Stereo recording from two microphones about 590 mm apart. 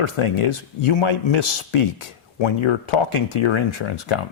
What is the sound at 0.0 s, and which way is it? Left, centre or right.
A man's voice, left.